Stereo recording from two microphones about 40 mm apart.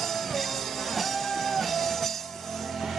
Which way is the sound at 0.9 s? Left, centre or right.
Centre.